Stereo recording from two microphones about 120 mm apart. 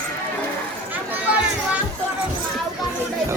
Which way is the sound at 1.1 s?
10° right (ahead or behind).